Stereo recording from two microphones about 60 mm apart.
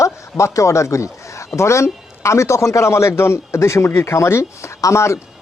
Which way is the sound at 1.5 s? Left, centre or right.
Left.